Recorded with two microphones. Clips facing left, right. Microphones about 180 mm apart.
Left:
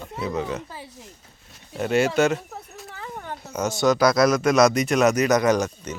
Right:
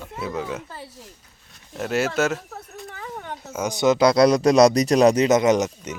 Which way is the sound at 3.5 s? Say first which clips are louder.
Right 1 dB; 15° right (ahead or behind).